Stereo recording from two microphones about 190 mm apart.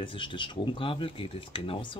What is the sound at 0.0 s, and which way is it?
Speech, 25° left (ahead or behind).